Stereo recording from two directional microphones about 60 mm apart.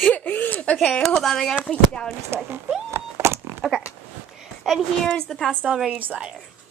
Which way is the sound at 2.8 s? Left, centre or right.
Right.